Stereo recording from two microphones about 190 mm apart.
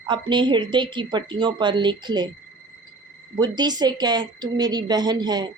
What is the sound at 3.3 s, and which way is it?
Speech, 20° right (ahead or behind).